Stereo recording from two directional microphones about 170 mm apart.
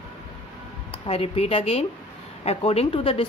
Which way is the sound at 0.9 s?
35° left (ahead or behind).